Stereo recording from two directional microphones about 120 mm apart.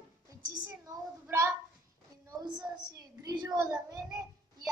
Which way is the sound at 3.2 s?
35° right (ahead or behind).